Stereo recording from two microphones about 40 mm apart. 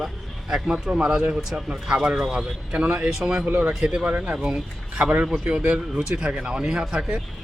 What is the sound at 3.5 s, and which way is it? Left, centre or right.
Speech, right.